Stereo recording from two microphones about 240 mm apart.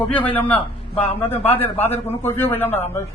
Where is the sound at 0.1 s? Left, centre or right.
Centre.